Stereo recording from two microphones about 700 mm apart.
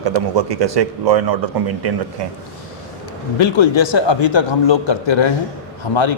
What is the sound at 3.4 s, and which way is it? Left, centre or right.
A man's voice, left.